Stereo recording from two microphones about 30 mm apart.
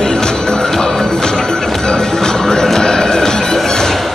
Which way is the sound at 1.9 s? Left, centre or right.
Left.